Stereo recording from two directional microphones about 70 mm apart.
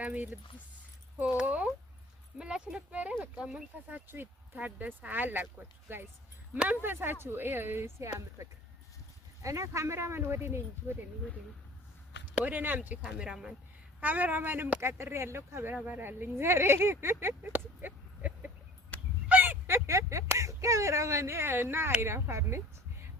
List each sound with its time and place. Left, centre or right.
0.0 s speech: centre
1.5 s speech: centre; by 10.9 s right
12.3 s speech: right
13.0 s speech: centre
14.0 s speech: right
14.8 s speech: right
15.7 s speech: right
18.9 s a sound: left
19.3 s a sound: right
19.6 s speech: right